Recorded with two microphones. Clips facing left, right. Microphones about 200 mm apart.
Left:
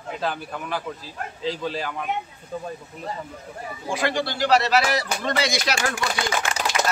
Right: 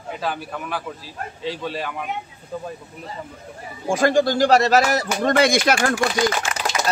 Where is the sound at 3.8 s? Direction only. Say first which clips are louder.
Right 8 dB; 45° right (ahead or behind).